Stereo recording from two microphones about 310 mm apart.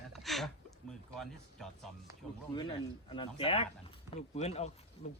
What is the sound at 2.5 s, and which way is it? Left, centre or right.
A man's voice, centre.